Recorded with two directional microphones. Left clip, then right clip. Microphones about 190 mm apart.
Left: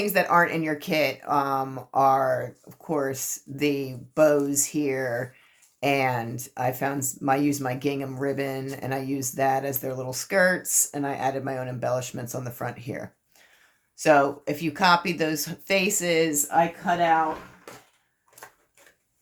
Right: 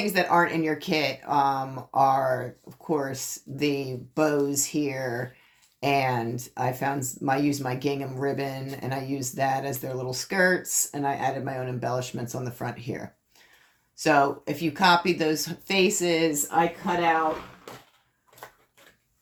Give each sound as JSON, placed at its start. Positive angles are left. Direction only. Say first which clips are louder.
{"t": 0.0, "sound": "speech", "louder": "left 1 dB", "side_deg": 35}